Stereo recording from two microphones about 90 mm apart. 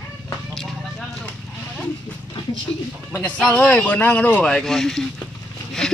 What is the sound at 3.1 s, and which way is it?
Speech, 15° left (ahead or behind).